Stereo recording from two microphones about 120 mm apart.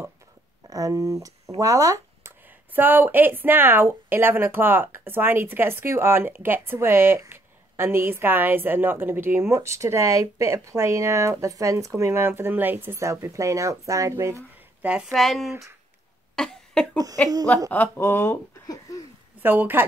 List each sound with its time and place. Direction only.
0.7 s speech: 30° right (ahead or behind)
2.7 s a woman's voice: 15° right (ahead or behind)
15.1 s speech: centre (ahead or behind)
16.3 s a sound: 5° left (ahead or behind)
17.2 s speech: 15° left (ahead or behind)
17.6 s a sound: 15° left (ahead or behind)
19.4 s speech: 15° right (ahead or behind)